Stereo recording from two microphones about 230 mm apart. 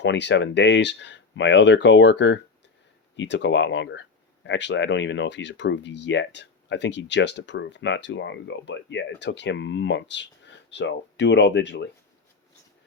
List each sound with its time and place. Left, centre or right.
0.0 s speech: left